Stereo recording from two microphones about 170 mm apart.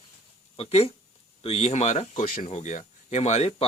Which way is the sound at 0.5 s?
35° left (ahead or behind).